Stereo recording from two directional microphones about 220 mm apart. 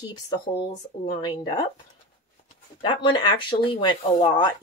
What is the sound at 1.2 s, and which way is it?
Speech, 20° left (ahead or behind).